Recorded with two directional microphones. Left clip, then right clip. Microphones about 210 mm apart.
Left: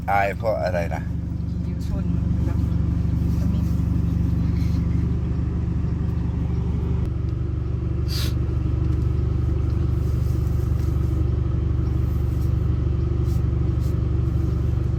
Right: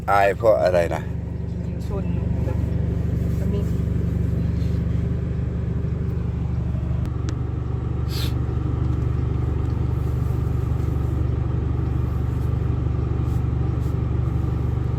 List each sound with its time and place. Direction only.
0.1 s speech: 15° right (ahead or behind)